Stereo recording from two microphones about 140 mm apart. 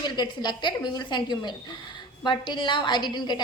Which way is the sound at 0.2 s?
30° left (ahead or behind).